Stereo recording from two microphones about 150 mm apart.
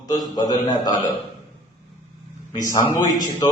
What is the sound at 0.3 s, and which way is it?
Speech, 25° left (ahead or behind).